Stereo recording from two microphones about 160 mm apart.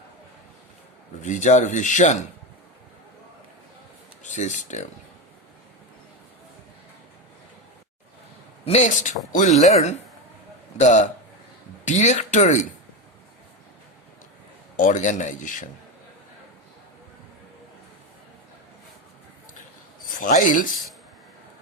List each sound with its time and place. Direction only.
1.2 s speech: 50° left (ahead or behind)
4.2 s speech: 50° left (ahead or behind)
8.6 s speech: 45° left (ahead or behind)
14.8 s speech: 50° left (ahead or behind)
20.1 s speech: 55° left (ahead or behind)